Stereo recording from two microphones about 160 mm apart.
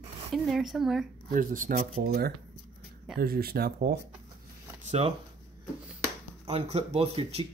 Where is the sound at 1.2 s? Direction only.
60° right (ahead or behind).